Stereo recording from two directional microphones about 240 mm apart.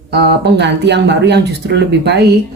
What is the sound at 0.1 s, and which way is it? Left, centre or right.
Speech, right.